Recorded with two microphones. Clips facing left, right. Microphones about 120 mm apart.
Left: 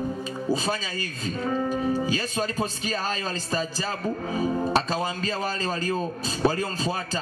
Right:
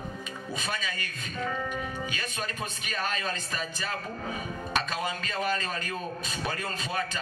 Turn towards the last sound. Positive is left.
turn(degrees=30)  # may be behind; listen again after turning